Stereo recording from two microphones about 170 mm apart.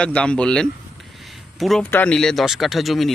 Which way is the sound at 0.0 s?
5° left (ahead or behind).